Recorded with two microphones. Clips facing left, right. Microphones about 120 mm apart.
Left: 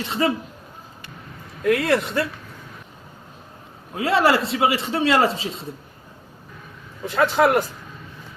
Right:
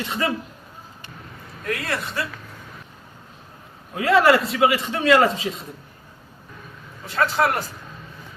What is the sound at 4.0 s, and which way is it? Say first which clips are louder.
A man's voice: right 2 dB; 30° left (ahead or behind).